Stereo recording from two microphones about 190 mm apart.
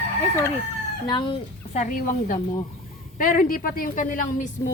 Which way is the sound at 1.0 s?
25° left (ahead or behind).